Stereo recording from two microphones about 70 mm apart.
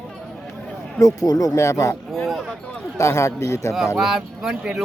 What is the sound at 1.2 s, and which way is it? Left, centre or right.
Speech, left.